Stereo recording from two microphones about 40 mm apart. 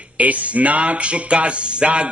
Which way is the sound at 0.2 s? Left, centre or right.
Right.